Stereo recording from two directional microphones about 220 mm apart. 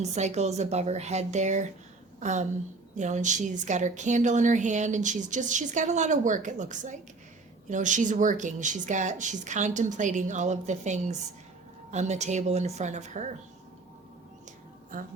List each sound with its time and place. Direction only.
0.0 s a woman's voice: 30° right (ahead or behind)